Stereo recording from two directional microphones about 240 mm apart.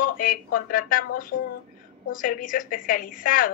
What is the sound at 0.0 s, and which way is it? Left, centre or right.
A woman's voice, left.